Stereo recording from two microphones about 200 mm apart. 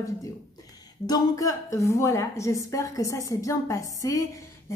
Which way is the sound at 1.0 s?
20° left (ahead or behind).